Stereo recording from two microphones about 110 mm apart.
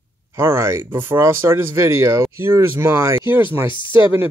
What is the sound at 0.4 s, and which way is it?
Speech, 25° right (ahead or behind).